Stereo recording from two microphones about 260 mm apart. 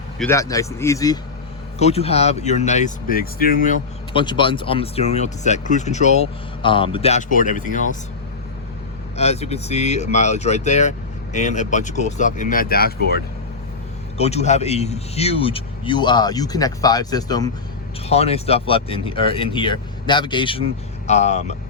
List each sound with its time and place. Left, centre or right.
0.2 s speech: centre
1.8 s speech: left
4.1 s speech: centre
9.1 s speech: left
14.2 s speech: left